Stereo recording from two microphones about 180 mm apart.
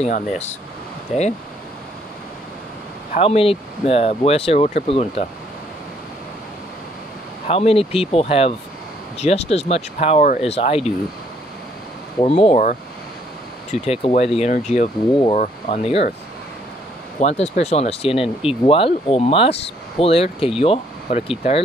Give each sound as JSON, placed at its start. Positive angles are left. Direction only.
{"t": 1.1, "sound": "speech", "side_deg": 0}
{"t": 3.2, "sound": "speech", "side_deg": 30}
{"t": 7.4, "sound": "speech", "side_deg": 35}
{"t": 12.2, "sound": "speech", "side_deg": 30}
{"t": 17.2, "sound": "speech", "side_deg": 40}